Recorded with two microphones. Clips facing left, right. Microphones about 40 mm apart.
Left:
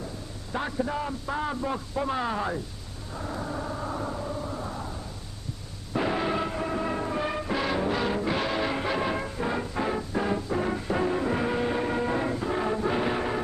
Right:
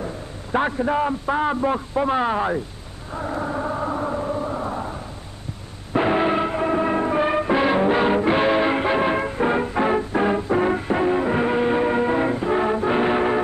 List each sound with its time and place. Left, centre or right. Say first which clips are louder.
0.0 s a man's voice: right 7 dB; right
3.2 s a sound: right 8 dB; right
5.9 s music: right 8 dB; right